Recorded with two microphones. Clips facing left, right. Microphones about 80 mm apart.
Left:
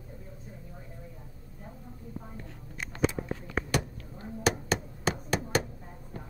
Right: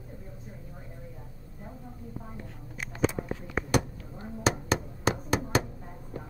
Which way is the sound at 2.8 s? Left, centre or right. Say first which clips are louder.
Right 1 dB; centre.